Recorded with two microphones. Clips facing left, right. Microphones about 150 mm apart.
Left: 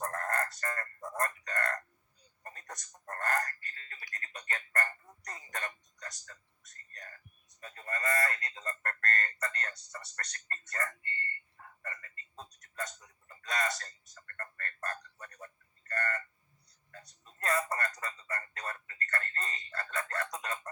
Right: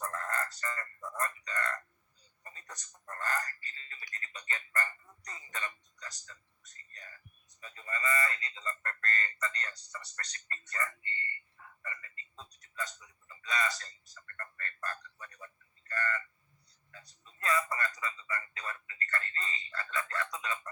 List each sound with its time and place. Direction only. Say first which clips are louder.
0.0 s chicken: left 2 dB; 55° left (ahead or behind)
2.4 s telephone: left 4 dB; 55° left (ahead or behind)
3.2 s a sound: left 3 dB; 60° left (ahead or behind)
18.0 s telephone: right 1 dB; 45° left (ahead or behind)
20.1 s chicken: even; 45° left (ahead or behind)